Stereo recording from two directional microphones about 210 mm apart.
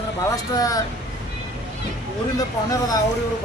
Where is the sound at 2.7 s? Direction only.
15° left (ahead or behind).